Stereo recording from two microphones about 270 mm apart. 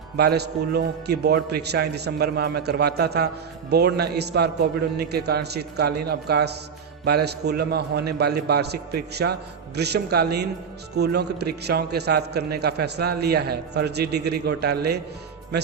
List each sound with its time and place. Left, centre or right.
0.2 s a man's voice: right